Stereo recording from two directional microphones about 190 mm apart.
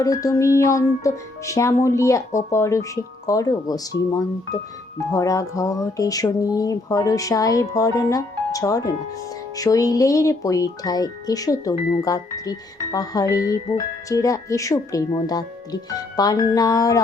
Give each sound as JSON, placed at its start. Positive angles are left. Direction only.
{"t": 0.0, "sound": "speech", "side_deg": 15}
{"t": 4.9, "sound": "speech", "side_deg": 15}